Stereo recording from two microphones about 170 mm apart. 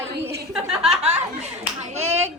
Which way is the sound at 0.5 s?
5° right (ahead or behind).